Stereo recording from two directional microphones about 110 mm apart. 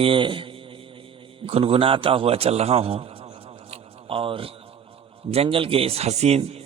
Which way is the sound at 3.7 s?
55° right (ahead or behind).